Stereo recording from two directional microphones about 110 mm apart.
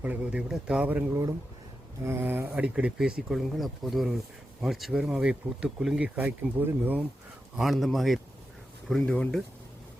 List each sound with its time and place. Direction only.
0.0 s speech: 15° right (ahead or behind)
7.5 s speech: centre (ahead or behind)